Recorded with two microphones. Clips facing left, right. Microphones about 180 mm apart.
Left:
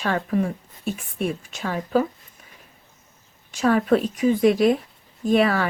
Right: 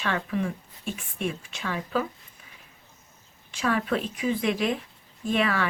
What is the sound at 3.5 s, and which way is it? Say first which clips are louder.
Speech: left 7 dB; 40° left (ahead or behind).